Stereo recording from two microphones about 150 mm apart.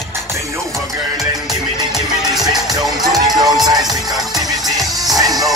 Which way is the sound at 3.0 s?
25° right (ahead or behind).